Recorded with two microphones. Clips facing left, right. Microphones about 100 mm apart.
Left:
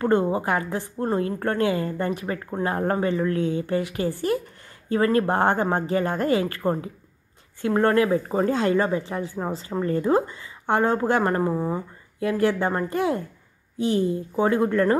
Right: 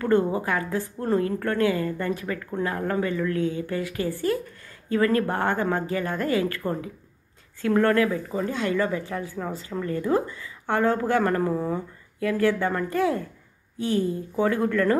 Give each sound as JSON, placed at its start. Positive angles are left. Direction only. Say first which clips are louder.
{"t": 0.0, "sound": "a woman's voice", "louder": "left 1 dB", "side_deg": 20}
{"t": 8.1, "sound": "a woman's voice", "louder": "left 6 dB", "side_deg": 40}